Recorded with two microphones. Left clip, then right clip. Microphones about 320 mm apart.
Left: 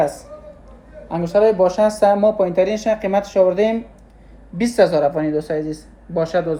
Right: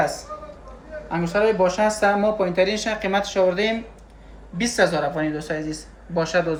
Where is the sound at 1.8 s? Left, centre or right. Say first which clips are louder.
Left 5 dB; centre.